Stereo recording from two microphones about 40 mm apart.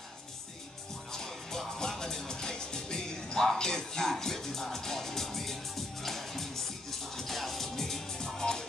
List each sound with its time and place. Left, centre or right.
1.1 s music: centre